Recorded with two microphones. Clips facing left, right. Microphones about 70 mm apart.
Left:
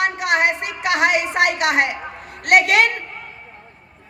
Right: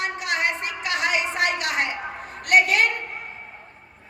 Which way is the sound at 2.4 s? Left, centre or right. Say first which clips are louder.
Left 4 dB; left.